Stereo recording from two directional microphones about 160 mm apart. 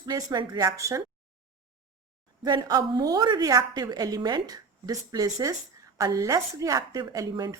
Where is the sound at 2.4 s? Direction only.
25° right (ahead or behind).